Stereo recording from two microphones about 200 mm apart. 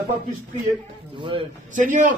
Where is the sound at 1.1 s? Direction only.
25° right (ahead or behind).